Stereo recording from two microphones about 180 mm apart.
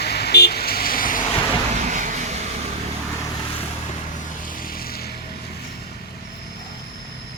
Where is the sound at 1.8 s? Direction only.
45° right (ahead or behind).